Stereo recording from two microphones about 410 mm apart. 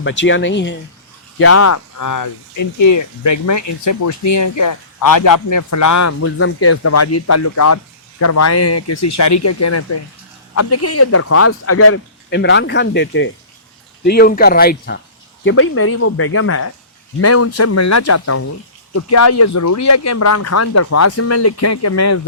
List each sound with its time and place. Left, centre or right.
0.0 s speech: left